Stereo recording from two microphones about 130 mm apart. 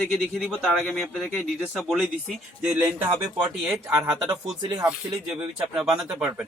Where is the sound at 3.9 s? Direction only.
30° right (ahead or behind).